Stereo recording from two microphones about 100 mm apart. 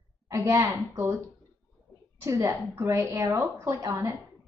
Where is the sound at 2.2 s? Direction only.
30° right (ahead or behind).